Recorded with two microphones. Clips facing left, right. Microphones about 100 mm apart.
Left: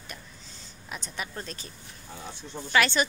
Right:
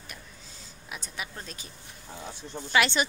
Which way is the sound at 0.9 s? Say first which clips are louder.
Left 2 dB; 5° right (ahead or behind).